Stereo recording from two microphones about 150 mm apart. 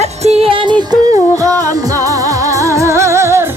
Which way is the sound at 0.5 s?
30° right (ahead or behind).